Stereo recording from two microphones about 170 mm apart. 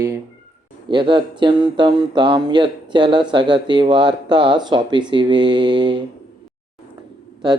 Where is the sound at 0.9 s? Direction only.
30° right (ahead or behind).